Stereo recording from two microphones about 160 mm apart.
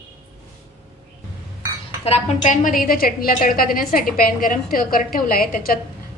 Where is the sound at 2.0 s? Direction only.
40° left (ahead or behind).